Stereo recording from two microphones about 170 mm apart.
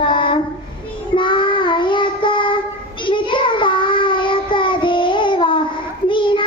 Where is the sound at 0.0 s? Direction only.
30° left (ahead or behind).